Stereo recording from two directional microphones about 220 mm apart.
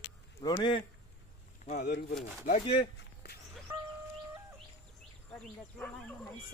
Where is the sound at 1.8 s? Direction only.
45° left (ahead or behind).